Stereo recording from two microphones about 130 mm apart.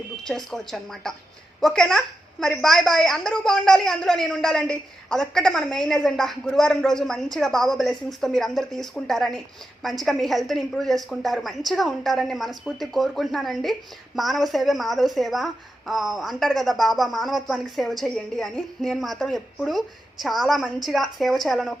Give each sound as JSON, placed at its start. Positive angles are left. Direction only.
{"t": 0.3, "sound": "a woman's voice", "side_deg": 5}